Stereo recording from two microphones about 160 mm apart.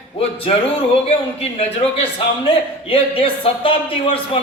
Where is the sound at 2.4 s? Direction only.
35° left (ahead or behind).